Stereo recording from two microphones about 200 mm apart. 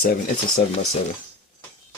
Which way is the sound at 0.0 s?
45° left (ahead or behind).